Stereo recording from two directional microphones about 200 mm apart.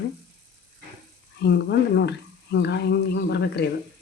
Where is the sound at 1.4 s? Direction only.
55° left (ahead or behind).